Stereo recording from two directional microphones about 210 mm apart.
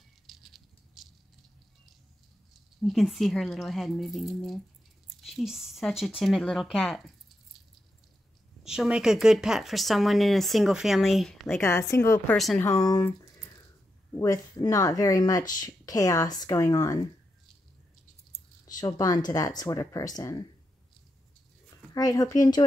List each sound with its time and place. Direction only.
0.3 s rattle: centre (ahead or behind)
2.8 s speech: centre (ahead or behind)
8.6 s speech: 5° right (ahead or behind)
11.4 s speech: 10° left (ahead or behind)
12.4 s speech: centre (ahead or behind)
12.6 s speech: 15° left (ahead or behind)
18.7 s speech: 20° left (ahead or behind)
21.9 s speech: 15° left (ahead or behind)